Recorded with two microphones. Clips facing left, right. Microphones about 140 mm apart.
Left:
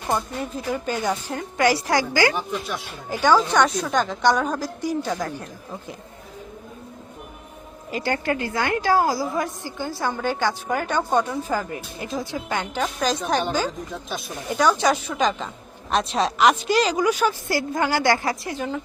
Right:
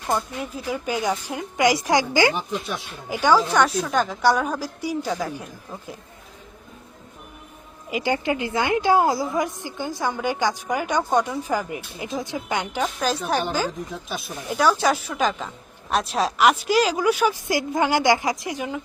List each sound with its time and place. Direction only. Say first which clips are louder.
0.1 s a woman's voice: even; 5° right (ahead or behind)
7.9 s a woman's voice: right 1 dB; 15° right (ahead or behind)
12.8 s a woman's voice: left 2 dB; 5° right (ahead or behind)